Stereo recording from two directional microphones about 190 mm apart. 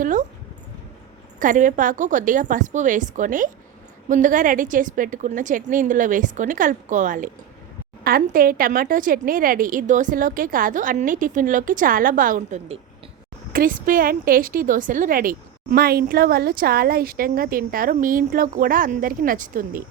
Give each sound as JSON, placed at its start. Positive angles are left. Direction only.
{"t": 0.0, "sound": "a sound", "side_deg": -40}
{"t": 1.4, "sound": "a woman's voice", "side_deg": -45}
{"t": 13.5, "sound": "a woman's voice", "side_deg": -45}